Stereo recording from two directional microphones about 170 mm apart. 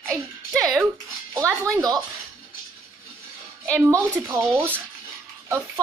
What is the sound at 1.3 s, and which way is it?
Speech, 20° right (ahead or behind).